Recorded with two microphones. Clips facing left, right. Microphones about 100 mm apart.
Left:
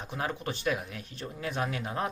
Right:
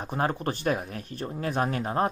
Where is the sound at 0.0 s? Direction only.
45° right (ahead or behind).